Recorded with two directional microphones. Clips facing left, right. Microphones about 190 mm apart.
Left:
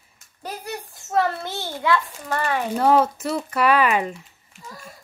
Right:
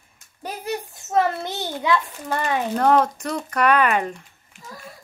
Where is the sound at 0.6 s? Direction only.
20° right (ahead or behind).